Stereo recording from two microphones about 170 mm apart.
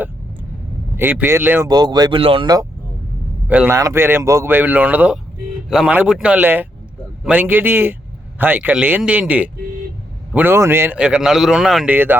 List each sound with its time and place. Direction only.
0.9 s speech: 10° right (ahead or behind)
3.5 s a man's voice: 10° right (ahead or behind)